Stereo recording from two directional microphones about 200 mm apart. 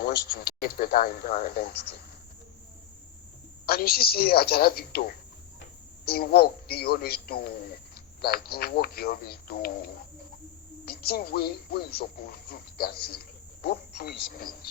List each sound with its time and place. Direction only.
0.0 s speech: 50° left (ahead or behind)
3.7 s speech: 50° left (ahead or behind)